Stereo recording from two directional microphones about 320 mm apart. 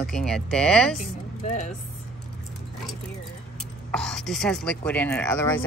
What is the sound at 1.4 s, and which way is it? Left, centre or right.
Speech, left.